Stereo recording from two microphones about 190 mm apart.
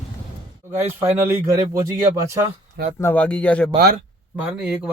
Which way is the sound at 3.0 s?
10° left (ahead or behind).